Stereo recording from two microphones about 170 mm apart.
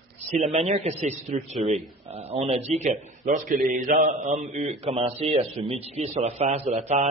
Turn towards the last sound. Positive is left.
turn(degrees=-45)  # may be behind; listen again after turning